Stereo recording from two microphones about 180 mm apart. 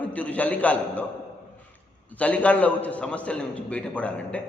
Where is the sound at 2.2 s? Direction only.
5° left (ahead or behind).